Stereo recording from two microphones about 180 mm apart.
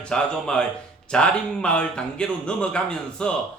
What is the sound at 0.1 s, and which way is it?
Speech, 5° left (ahead or behind).